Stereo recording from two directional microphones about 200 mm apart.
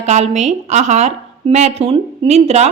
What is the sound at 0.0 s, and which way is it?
A woman's voice, 35° right (ahead or behind).